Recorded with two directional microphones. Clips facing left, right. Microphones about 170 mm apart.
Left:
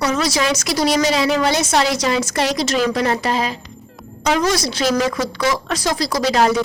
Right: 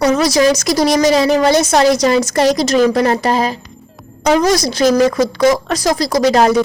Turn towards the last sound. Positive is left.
turn(degrees=-45)  # may be behind; listen again after turning